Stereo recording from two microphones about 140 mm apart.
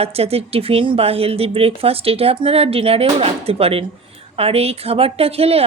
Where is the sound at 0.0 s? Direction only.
45° right (ahead or behind).